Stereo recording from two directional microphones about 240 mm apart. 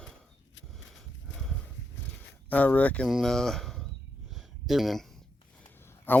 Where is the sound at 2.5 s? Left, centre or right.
Centre.